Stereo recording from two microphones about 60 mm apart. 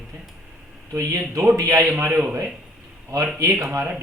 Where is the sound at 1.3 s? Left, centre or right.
Right.